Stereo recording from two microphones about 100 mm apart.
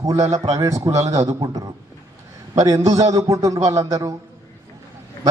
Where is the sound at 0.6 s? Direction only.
30° right (ahead or behind).